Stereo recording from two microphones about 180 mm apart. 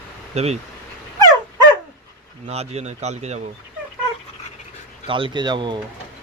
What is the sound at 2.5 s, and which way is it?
Speech, 35° right (ahead or behind).